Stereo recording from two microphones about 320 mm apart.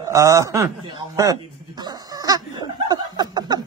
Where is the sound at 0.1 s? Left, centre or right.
Centre.